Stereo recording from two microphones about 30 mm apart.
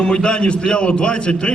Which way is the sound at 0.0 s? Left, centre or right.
Left.